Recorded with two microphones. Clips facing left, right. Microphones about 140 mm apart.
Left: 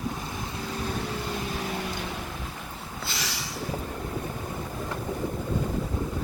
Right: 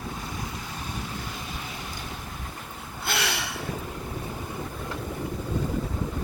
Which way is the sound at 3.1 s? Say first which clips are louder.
Right 8 dB; 65° right (ahead or behind).